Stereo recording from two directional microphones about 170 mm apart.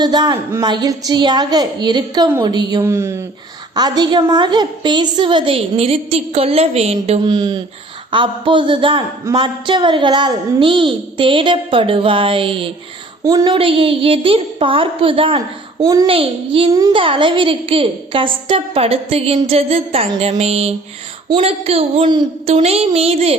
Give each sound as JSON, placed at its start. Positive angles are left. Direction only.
{"t": 0.0, "sound": "a woman's voice", "side_deg": -25}
{"t": 7.3, "sound": "a woman's voice", "side_deg": -25}
{"t": 15.8, "sound": "a woman's voice", "side_deg": -20}
{"t": 16.0, "sound": "a child's voice", "side_deg": -35}